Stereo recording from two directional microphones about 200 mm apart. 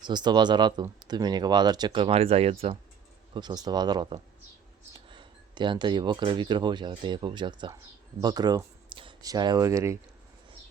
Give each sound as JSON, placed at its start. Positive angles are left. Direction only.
{"t": 0.0, "sound": "speech", "side_deg": -20}